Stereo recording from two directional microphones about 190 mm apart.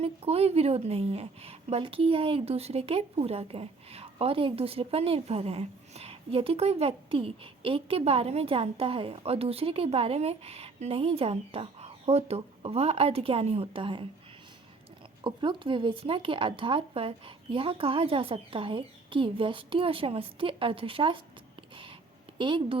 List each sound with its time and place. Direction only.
0.0 s a woman's voice: 30° right (ahead or behind)
15.2 s speech: 25° right (ahead or behind)
22.4 s speech: 25° right (ahead or behind)